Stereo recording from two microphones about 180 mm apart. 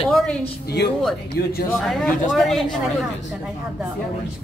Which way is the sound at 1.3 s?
60° left (ahead or behind).